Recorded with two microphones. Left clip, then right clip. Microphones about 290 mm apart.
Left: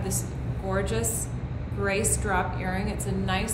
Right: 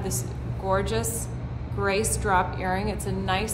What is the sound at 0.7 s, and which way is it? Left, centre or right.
A woman's voice, centre.